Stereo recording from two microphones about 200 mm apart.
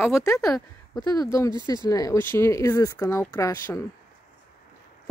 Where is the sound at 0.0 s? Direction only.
15° left (ahead or behind).